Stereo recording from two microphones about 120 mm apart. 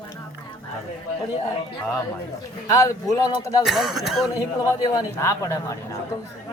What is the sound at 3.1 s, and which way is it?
Speech, 25° left (ahead or behind).